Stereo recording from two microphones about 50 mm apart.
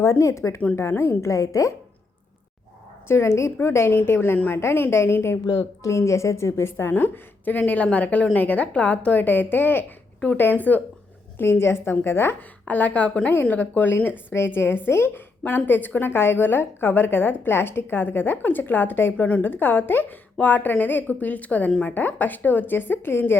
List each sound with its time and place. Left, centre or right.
0.0 s speech: left
0.8 s a woman's voice: left
1.2 s a woman's voice: left
3.1 s a woman's voice: left
5.8 s a woman's voice: left
9.2 s a woman's voice: left
11.3 s a woman's voice: left
12.6 s a woman's voice: left
14.3 s a woman's voice: left